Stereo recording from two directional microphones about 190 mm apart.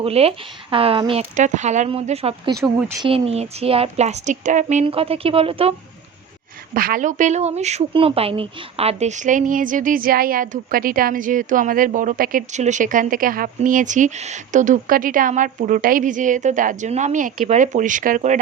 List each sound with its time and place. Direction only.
0.0 s a woman's voice: 30° right (ahead or behind)
6.7 s speech: 50° right (ahead or behind)